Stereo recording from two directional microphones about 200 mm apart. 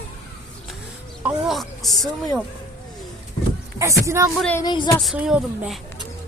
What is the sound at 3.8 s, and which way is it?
Speech, 15° right (ahead or behind).